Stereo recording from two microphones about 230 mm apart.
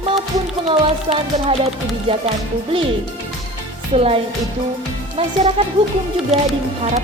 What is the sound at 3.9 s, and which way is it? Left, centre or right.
Speech, right.